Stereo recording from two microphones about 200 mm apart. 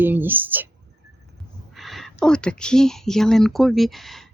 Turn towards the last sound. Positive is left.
turn(degrees=0)  # may be behind; listen again after turning